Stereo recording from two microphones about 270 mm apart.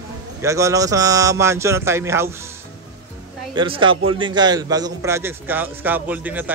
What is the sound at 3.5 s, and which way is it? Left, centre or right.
A man's voice, centre.